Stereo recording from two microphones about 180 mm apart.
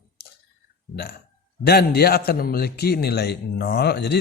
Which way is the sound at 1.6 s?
65° left (ahead or behind).